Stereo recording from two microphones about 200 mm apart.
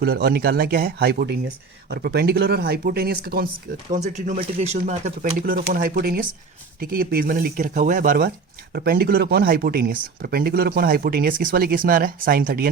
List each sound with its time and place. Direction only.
0.0 s speech: 50° right (ahead or behind)
3.9 s speech: 35° right (ahead or behind)
5.5 s speech: 50° right (ahead or behind)